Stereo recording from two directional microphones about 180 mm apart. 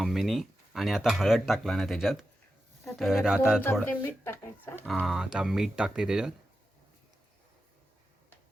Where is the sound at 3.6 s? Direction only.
10° left (ahead or behind).